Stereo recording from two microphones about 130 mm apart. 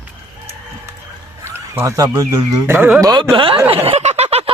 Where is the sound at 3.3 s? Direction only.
40° right (ahead or behind).